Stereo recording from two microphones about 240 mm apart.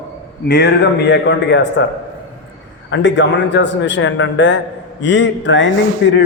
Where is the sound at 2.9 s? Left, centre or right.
Left.